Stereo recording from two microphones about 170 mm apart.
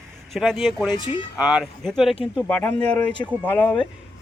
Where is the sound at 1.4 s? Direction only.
5° right (ahead or behind).